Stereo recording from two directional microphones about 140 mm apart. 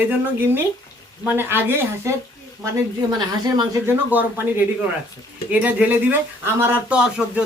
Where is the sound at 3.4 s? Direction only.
30° right (ahead or behind).